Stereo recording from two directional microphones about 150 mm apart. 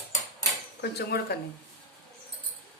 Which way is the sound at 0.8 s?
90° left.